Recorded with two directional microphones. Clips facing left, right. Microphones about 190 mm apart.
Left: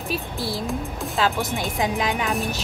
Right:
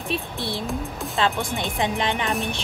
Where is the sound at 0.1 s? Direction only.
Centre (ahead or behind).